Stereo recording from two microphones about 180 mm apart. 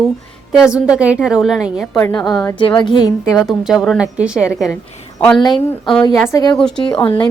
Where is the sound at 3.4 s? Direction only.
Centre (ahead or behind).